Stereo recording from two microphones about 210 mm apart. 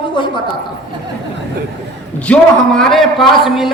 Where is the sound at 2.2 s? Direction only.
5° left (ahead or behind).